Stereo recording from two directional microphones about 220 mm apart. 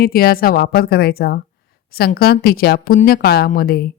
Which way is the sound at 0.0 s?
40° left (ahead or behind).